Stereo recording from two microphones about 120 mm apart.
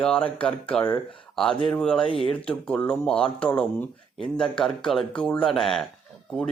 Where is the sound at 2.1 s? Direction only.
50° left (ahead or behind).